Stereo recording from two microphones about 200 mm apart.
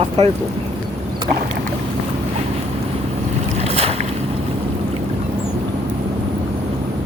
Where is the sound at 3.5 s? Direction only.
30° right (ahead or behind).